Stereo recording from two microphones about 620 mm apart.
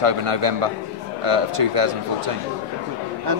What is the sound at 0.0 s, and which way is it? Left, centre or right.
A man's voice, right.